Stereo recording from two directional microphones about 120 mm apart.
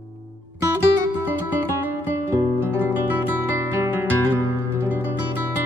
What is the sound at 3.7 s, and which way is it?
Music, 20° right (ahead or behind).